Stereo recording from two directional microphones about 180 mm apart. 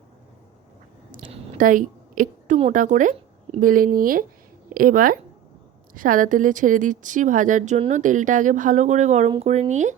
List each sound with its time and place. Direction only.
1.5 s a woman's voice: 50° right (ahead or behind)